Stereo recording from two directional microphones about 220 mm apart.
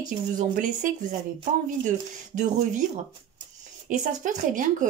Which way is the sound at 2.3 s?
35° right (ahead or behind).